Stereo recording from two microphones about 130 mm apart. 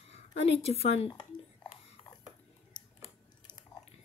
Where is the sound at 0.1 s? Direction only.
55° left (ahead or behind).